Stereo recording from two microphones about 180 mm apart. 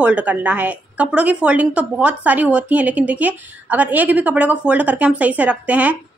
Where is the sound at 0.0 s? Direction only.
10° right (ahead or behind).